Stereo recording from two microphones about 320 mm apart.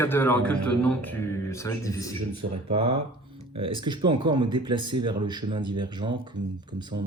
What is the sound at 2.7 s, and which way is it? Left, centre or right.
Speech, right.